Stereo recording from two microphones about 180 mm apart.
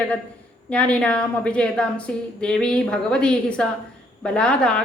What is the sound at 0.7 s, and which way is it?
A woman's voice, 5° left (ahead or behind).